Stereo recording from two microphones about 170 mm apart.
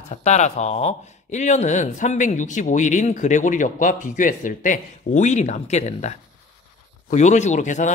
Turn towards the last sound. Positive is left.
turn(degrees=45)  # may be behind; listen again after turning